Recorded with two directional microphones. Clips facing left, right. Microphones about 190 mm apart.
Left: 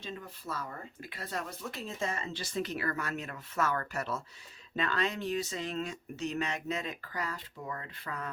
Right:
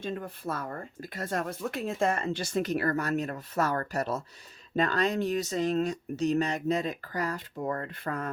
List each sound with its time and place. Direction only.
0.0 s speech: 55° right (ahead or behind)